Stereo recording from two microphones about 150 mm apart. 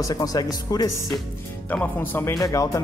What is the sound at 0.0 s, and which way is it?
Speech, 25° left (ahead or behind).